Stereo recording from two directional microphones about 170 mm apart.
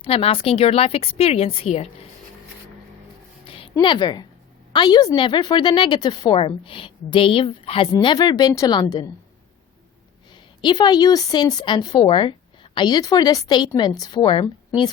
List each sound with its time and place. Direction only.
0.0 s a woman's voice: 35° left (ahead or behind)
3.4 s a sound: 30° left (ahead or behind)
4.7 s a woman's voice: 25° left (ahead or behind)
10.6 s a woman's voice: 25° left (ahead or behind)